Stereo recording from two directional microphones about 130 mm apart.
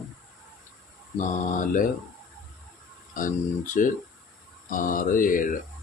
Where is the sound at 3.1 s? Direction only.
90° left.